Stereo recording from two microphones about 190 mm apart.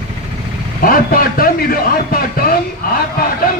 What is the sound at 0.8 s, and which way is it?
A man's voice, 50° left (ahead or behind).